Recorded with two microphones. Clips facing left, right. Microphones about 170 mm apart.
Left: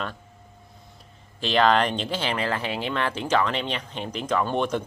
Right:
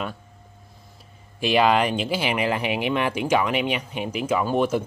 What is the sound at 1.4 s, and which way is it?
Speech, 10° right (ahead or behind).